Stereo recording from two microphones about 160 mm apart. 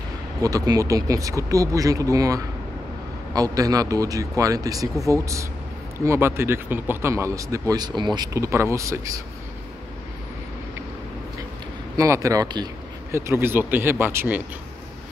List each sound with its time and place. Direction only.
0.4 s speech: 25° right (ahead or behind)
12.0 s speech: 20° right (ahead or behind)